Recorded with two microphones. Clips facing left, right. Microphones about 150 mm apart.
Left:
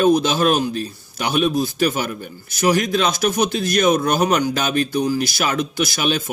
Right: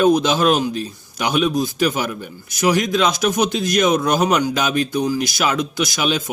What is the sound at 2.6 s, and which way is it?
Speech, 20° right (ahead or behind).